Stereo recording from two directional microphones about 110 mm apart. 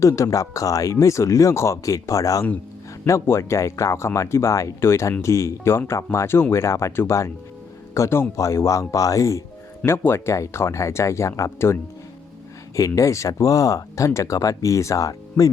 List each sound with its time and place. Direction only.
0.0 s speech: 30° left (ahead or behind)